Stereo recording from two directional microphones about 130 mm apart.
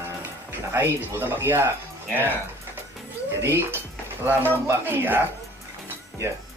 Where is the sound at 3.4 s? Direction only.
15° right (ahead or behind).